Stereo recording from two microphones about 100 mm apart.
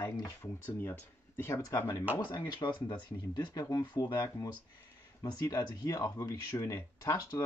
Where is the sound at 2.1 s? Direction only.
45° left (ahead or behind).